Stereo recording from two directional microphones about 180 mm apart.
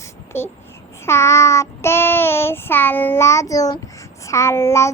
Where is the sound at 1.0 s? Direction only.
15° left (ahead or behind).